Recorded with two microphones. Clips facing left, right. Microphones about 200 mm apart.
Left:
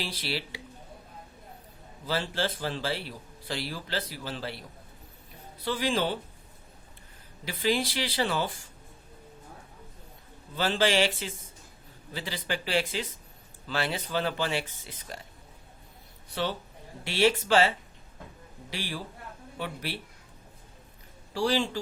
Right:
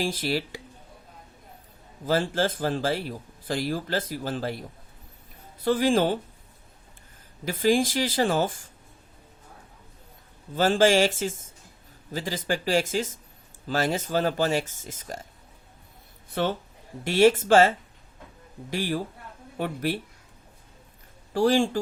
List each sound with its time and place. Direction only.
0.0 s speech: 45° right (ahead or behind)
2.0 s speech: 45° right (ahead or behind)
5.6 s speech: 50° right (ahead or behind)
7.4 s speech: 45° right (ahead or behind)
10.5 s speech: 45° right (ahead or behind)
16.3 s speech: 50° right (ahead or behind)
21.3 s speech: 50° right (ahead or behind)